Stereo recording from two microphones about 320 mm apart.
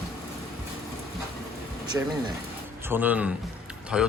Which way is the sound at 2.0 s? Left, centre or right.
Centre.